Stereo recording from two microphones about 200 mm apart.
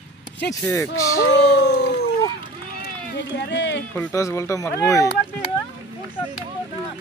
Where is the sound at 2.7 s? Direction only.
55° left (ahead or behind).